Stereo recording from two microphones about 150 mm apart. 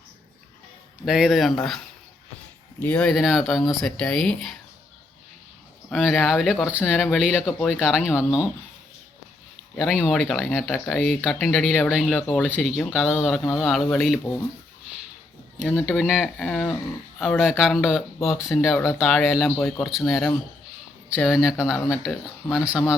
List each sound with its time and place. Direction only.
1.0 s speech: 5° right (ahead or behind)
2.8 s speech: 10° left (ahead or behind)
5.9 s speech: centre (ahead or behind)
9.7 s speech: 5° right (ahead or behind)
15.9 s speech: 5° right (ahead or behind)
16.4 s a sound: 5° left (ahead or behind)
17.2 s speech: centre (ahead or behind)
19.5 s speech: 10° left (ahead or behind)